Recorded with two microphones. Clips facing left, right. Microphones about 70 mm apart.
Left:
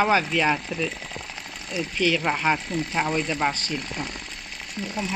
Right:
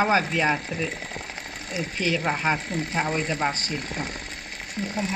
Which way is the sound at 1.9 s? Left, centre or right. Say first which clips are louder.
Left 3 dB; left.